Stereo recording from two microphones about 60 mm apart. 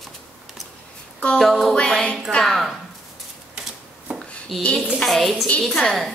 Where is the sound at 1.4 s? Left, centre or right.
Centre.